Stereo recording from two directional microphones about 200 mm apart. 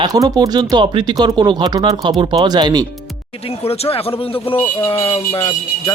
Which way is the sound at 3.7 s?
30° left (ahead or behind).